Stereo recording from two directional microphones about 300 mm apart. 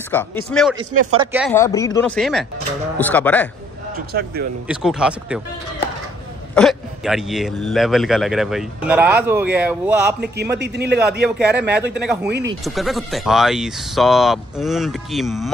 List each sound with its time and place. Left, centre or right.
0.1 s a man's voice: centre
1.5 s a man's voice: centre
3.9 s a man's voice: right
4.6 s a man's voice: centre
6.5 s a man's voice: centre
10.2 s a man's voice: right
11.5 s a man's voice: centre
12.3 s a man's voice: right
12.6 s a man's voice: centre